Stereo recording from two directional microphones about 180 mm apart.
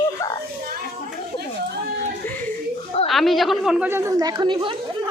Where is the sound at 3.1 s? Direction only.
Centre (ahead or behind).